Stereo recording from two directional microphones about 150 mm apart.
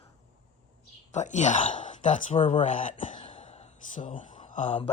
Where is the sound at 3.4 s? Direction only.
45° left (ahead or behind).